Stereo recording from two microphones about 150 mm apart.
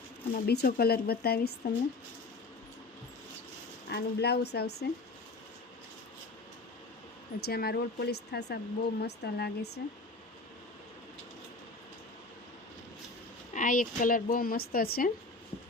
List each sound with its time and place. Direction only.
0.4 s speech: 90° left
3.8 s speech: 90° left
7.4 s speech: 90° left
13.5 s speech: 60° left (ahead or behind); by 15.1 s 80° left